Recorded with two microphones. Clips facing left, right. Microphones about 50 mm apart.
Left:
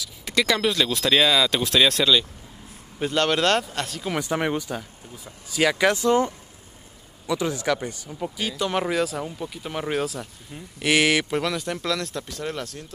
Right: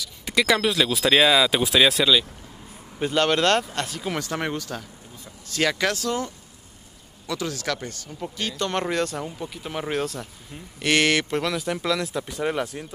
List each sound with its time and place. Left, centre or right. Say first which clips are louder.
0.0 s speech: right 1 dB; centre
4.2 s speech: left 7 dB; centre